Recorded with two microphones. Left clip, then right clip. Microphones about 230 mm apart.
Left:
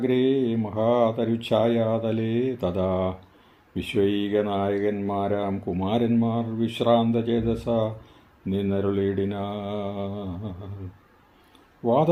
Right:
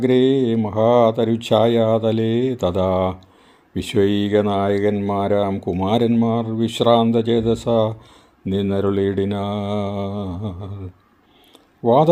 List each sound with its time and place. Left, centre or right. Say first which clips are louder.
0.0 s speech: right 6 dB; right
11.8 s speech: right 7 dB; right